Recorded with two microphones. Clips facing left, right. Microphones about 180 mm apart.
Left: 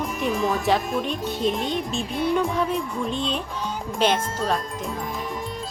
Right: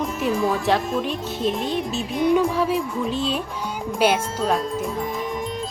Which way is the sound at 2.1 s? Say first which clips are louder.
Right 5 dB; 15° right (ahead or behind).